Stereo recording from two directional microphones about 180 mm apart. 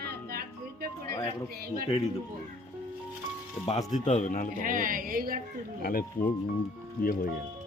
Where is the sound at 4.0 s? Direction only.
40° left (ahead or behind).